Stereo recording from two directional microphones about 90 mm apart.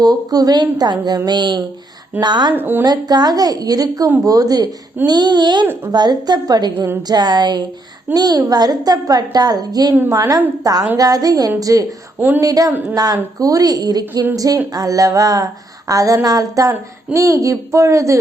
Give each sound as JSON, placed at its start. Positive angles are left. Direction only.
{"t": 0.0, "sound": "a woman's voice", "side_deg": -45}
{"t": 2.5, "sound": "speech", "side_deg": -25}
{"t": 2.8, "sound": "a woman's voice", "side_deg": -50}
{"t": 6.7, "sound": "speech", "side_deg": -25}
{"t": 7.1, "sound": "a woman's voice", "side_deg": -50}